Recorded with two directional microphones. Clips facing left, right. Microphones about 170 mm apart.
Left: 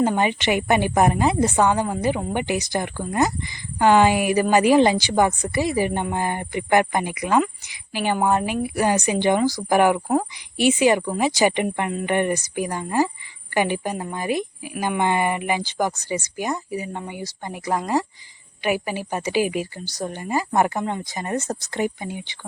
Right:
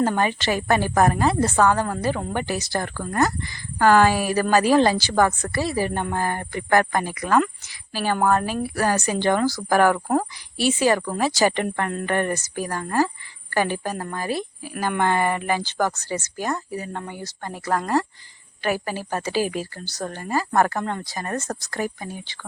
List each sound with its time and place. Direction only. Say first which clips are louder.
0.0 s a woman's voice: left 1 dB; 15° left (ahead or behind)